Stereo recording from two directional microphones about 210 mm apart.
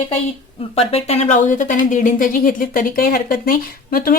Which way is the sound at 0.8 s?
30° left (ahead or behind).